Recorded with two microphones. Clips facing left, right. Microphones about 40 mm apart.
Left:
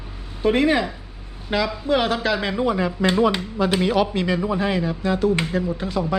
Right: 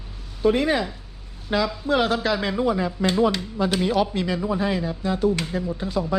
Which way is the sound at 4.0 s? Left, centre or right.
Left.